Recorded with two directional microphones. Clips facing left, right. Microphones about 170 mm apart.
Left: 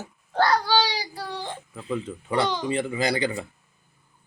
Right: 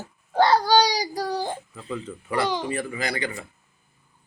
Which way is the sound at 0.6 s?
40° right (ahead or behind).